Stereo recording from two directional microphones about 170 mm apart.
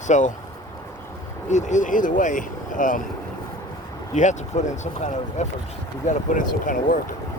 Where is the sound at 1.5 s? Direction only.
45° left (ahead or behind).